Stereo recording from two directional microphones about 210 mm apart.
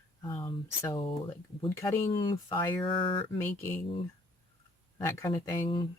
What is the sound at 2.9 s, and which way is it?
Speech, 25° left (ahead or behind).